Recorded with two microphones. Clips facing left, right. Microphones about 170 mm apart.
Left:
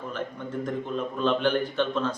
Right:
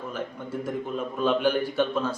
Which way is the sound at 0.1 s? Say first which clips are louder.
Left 1 dB; 10° right (ahead or behind).